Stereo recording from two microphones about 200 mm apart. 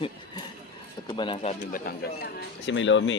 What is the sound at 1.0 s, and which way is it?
Speech, 25° left (ahead or behind).